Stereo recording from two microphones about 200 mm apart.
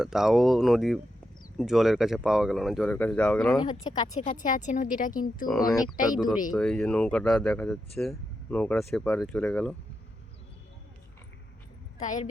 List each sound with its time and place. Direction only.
0.0 s speech: centre (ahead or behind)
3.6 s speech: 20° left (ahead or behind)
4.4 s speech: 40° left (ahead or behind)
5.5 s speech: centre (ahead or behind)
11.9 s a woman's voice: 40° left (ahead or behind)